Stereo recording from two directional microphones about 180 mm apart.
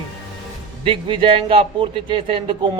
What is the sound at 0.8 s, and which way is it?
Speech, 30° right (ahead or behind).